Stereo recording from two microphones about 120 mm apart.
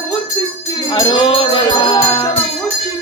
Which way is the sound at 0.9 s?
45° left (ahead or behind).